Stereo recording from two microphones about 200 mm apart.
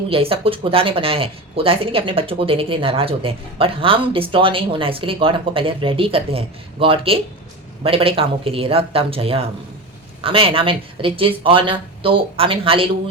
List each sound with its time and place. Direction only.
0.1 s speech: 30° right (ahead or behind)